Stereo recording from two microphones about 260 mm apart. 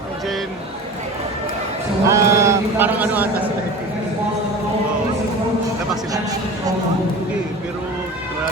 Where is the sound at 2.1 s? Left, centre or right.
Centre.